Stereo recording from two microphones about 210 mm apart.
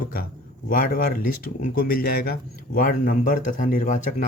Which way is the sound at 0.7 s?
40° left (ahead or behind).